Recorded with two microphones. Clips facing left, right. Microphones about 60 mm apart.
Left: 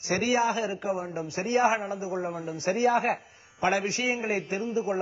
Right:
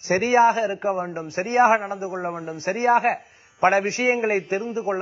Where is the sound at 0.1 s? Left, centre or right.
Right.